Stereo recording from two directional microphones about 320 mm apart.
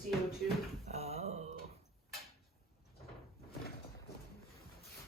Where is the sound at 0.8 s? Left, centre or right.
Centre.